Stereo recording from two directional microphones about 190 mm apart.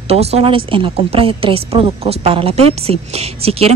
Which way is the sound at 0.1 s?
35° right (ahead or behind).